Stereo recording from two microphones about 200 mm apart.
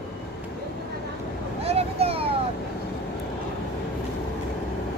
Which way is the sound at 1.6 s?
30° right (ahead or behind).